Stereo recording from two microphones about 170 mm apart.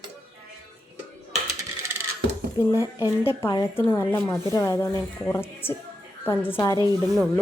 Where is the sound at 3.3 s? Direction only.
15° left (ahead or behind).